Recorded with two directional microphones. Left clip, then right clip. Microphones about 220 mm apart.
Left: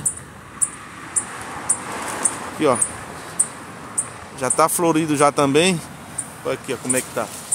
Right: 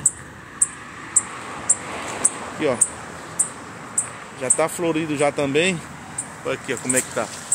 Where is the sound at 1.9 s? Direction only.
40° left (ahead or behind).